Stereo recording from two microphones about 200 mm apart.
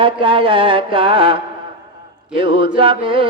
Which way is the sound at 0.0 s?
25° right (ahead or behind).